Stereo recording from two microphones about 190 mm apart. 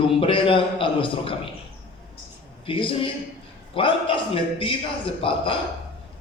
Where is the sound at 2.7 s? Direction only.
25° left (ahead or behind).